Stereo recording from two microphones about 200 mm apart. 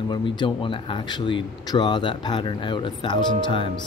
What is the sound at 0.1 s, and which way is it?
Speech, 25° left (ahead or behind).